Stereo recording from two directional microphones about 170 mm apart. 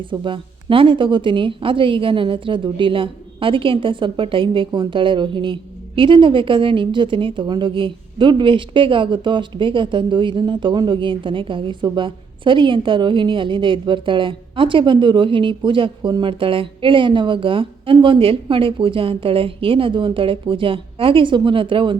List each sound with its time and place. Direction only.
0.1 s a woman's voice: 30° right (ahead or behind)